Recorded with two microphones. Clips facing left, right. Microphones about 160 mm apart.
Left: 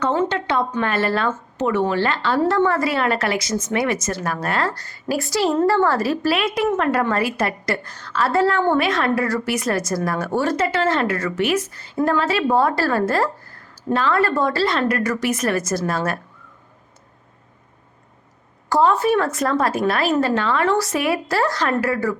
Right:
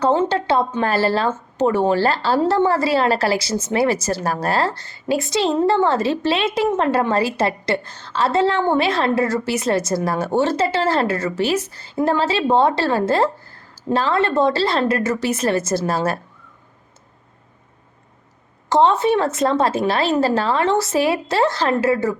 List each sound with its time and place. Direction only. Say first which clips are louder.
0.0 s a woman's voice: right 3 dB; 30° right (ahead or behind)
18.7 s a woman's voice: right 1 dB; 25° right (ahead or behind)